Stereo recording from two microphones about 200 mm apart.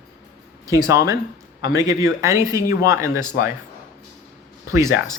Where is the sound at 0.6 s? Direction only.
15° right (ahead or behind).